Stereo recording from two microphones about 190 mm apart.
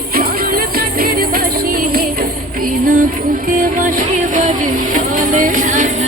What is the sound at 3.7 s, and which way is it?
Music, 45° right (ahead or behind).